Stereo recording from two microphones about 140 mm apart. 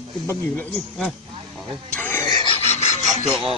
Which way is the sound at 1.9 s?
15° left (ahead or behind).